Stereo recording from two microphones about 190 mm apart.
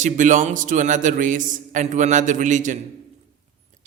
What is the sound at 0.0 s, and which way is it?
A man's voice, 40° right (ahead or behind).